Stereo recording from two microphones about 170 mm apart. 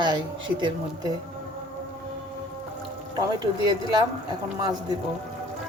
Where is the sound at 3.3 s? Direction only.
25° right (ahead or behind).